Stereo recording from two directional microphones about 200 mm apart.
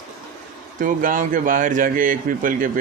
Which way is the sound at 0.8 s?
40° right (ahead or behind).